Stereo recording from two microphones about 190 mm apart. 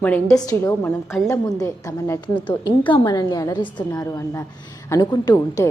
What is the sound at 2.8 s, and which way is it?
A woman's voice, 25° left (ahead or behind).